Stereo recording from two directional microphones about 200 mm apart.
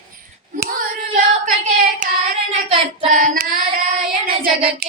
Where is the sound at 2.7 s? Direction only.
40° right (ahead or behind).